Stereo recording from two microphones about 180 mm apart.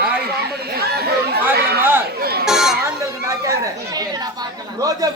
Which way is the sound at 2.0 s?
60° right (ahead or behind).